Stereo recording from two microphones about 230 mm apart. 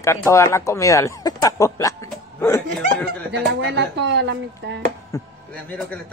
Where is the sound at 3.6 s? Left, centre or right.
Right.